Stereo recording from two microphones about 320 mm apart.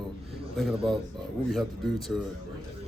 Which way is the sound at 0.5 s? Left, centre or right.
Centre.